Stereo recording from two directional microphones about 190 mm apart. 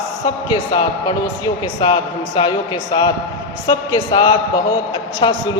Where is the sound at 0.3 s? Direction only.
25° left (ahead or behind).